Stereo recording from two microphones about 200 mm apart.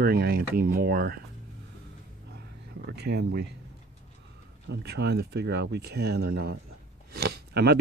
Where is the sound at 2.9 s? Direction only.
55° right (ahead or behind).